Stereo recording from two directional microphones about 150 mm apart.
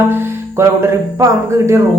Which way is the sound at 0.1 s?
15° right (ahead or behind).